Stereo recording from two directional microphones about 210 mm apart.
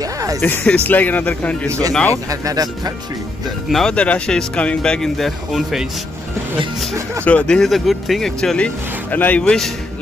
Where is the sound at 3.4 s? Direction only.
Centre (ahead or behind).